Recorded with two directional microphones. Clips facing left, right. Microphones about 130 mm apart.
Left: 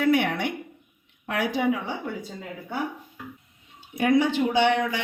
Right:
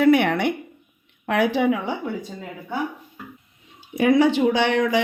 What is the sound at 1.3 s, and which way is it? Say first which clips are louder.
Speech: right 6 dB; 70° right (ahead or behind).